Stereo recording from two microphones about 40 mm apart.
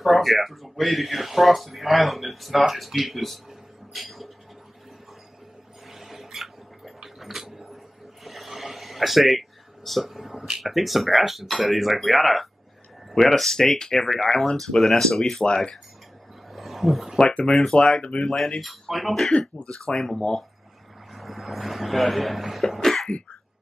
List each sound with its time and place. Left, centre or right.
0.0 s speech: centre
5.9 s a sound: centre
10.6 s speech: centre
16.5 s roaring cats: centre
17.2 s speech: left
17.5 s speech: centre
17.7 s speech: left
18.6 s speech: centre
21.1 s speech: centre
22.8 s cough: centre